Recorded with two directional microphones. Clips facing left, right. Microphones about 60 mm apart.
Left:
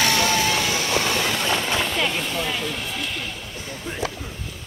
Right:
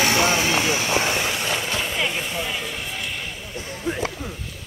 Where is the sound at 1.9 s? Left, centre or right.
Centre.